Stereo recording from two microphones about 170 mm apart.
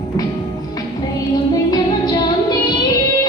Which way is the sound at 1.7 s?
25° left (ahead or behind).